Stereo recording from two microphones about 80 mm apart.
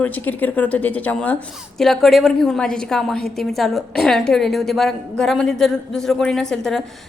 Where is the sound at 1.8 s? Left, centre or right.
Centre.